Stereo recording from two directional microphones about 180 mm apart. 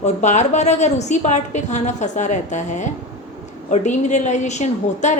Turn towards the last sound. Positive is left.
turn(degrees=40)  # may be behind; listen again after turning